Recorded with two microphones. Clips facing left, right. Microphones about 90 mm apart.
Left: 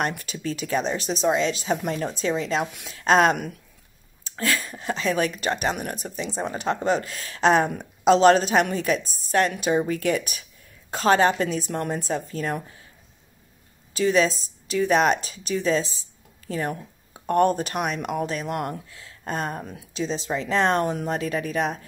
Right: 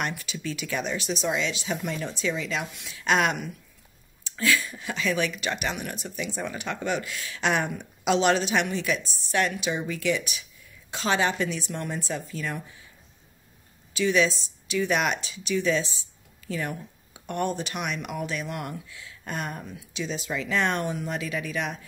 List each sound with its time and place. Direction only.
0.0 s a woman's voice: 40° left (ahead or behind)
13.9 s speech: 40° left (ahead or behind)